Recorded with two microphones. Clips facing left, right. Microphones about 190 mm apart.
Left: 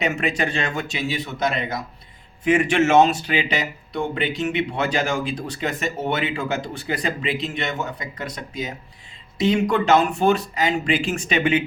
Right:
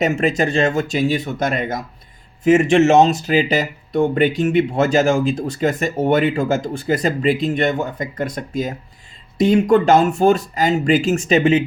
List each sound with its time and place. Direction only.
0.0 s speech: 40° right (ahead or behind)